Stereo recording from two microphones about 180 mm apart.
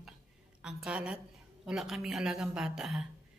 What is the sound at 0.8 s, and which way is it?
Speech, 5° right (ahead or behind).